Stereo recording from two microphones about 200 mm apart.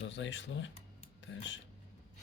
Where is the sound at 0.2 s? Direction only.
65° left (ahead or behind).